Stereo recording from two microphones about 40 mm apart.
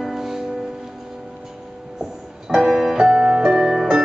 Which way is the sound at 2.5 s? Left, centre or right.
Centre.